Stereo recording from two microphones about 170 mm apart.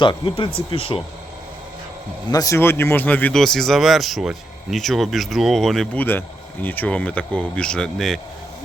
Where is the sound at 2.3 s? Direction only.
20° left (ahead or behind).